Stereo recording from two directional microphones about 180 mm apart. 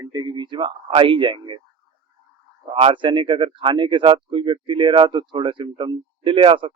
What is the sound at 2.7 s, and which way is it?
Speech, 25° right (ahead or behind).